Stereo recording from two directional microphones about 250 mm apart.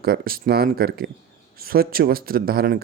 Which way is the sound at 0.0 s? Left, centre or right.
Right.